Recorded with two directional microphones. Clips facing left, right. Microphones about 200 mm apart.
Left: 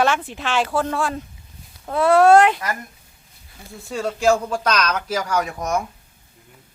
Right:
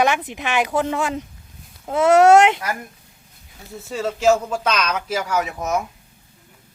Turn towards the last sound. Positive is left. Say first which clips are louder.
# even
turn(degrees=-5)  # may be behind; listen again after turning